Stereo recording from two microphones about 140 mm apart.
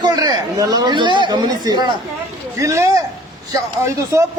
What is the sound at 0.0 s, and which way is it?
Speech, 30° right (ahead or behind).